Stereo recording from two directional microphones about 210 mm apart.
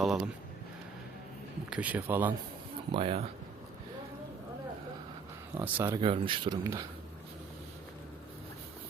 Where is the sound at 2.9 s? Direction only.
25° right (ahead or behind).